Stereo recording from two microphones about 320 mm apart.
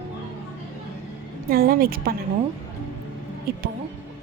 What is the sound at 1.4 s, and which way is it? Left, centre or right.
Speech, right.